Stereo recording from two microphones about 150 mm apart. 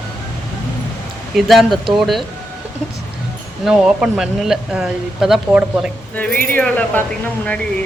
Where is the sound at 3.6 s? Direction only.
5° right (ahead or behind).